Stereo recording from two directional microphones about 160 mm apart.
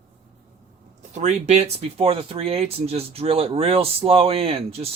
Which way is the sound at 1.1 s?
45° right (ahead or behind).